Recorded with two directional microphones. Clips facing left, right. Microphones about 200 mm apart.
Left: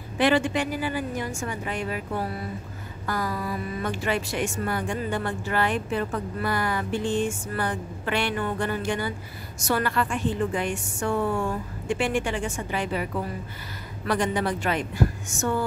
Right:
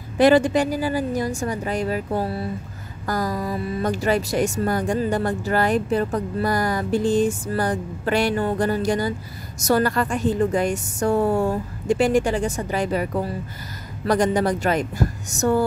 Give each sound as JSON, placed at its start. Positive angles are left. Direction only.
{"t": 0.2, "sound": "speech", "side_deg": -40}